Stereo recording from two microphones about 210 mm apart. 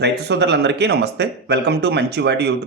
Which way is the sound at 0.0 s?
55° right (ahead or behind).